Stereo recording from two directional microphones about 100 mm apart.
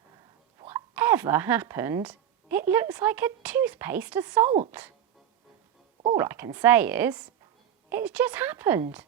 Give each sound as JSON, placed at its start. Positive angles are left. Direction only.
{"t": 0.7, "sound": "speech", "side_deg": -20}
{"t": 6.1, "sound": "speech", "side_deg": -25}